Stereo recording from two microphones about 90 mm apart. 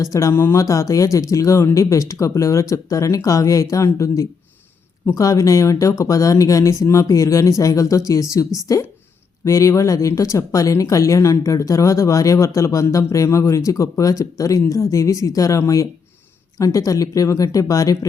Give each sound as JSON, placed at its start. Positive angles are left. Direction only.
{"t": 0.0, "sound": "speech", "side_deg": 35}